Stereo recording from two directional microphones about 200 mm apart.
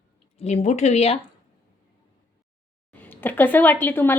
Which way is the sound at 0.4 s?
35° left (ahead or behind).